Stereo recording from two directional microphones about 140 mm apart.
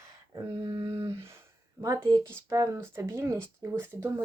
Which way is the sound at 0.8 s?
20° right (ahead or behind).